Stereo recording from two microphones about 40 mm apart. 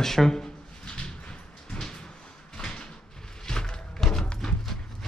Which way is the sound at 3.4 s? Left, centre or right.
Centre.